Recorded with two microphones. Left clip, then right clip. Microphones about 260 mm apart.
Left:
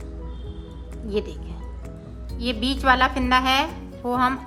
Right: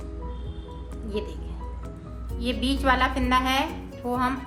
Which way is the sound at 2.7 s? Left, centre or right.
Centre.